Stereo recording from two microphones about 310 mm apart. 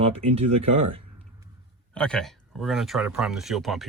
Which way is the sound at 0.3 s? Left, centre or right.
Centre.